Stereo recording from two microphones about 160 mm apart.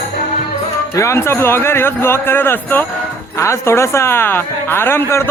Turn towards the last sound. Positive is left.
turn(degrees=15)  # may be behind; listen again after turning